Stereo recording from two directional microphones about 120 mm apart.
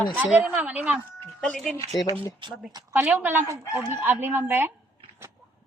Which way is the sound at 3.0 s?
15° right (ahead or behind).